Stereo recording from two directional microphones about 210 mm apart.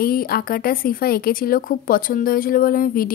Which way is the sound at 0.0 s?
45° left (ahead or behind).